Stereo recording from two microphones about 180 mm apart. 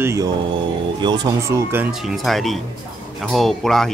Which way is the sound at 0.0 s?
15° right (ahead or behind).